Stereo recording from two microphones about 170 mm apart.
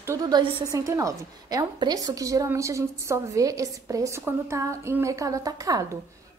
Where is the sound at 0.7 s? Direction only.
20° right (ahead or behind).